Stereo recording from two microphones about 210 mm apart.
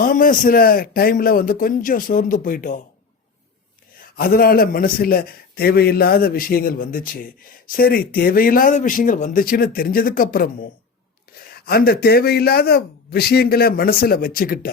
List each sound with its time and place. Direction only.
0.0 s a man's voice: 40° left (ahead or behind)
4.2 s a man's voice: 45° left (ahead or behind)